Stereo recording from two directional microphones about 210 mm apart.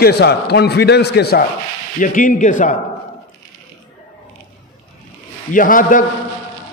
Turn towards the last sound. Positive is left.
turn(degrees=40)  # may be behind; listen again after turning